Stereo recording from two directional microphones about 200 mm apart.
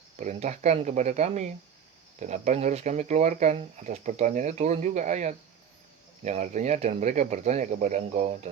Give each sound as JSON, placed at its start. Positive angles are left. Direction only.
{"t": 0.2, "sound": "speech", "side_deg": -35}